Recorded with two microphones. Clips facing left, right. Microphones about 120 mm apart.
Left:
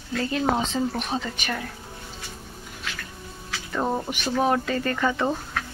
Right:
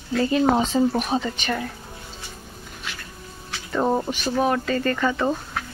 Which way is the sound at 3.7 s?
10° right (ahead or behind).